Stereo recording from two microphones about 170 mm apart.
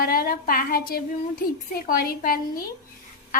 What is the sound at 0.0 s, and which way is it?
A woman's voice, 60° left (ahead or behind).